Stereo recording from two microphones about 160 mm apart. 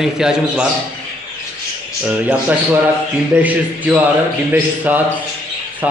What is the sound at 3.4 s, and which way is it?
A man's voice, 10° right (ahead or behind).